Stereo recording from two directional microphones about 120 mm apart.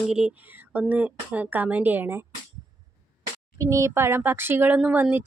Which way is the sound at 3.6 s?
25° right (ahead or behind).